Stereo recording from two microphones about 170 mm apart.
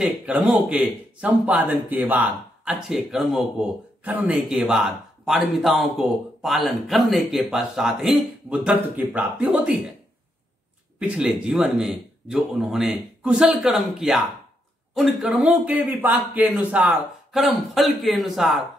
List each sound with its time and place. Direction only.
0.0 s speech: 5° right (ahead or behind)
11.0 s speech: 5° right (ahead or behind)